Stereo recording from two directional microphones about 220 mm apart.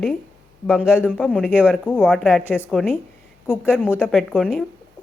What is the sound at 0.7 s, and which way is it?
A woman's voice, 5° right (ahead or behind).